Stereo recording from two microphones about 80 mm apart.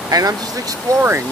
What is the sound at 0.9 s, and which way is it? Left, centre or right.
Speech, right.